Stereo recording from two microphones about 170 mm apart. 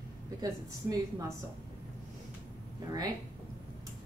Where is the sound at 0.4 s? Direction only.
20° right (ahead or behind).